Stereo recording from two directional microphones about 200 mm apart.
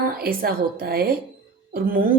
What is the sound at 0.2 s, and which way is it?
Speech, 50° right (ahead or behind).